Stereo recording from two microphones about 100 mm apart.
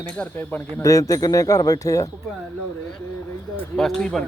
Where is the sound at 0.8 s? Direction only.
35° left (ahead or behind).